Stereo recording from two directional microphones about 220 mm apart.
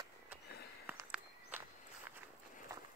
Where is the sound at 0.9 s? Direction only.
10° right (ahead or behind).